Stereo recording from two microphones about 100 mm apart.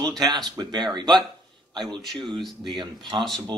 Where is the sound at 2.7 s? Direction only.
50° right (ahead or behind).